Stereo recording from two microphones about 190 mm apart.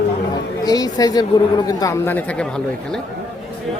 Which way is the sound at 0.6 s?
20° left (ahead or behind).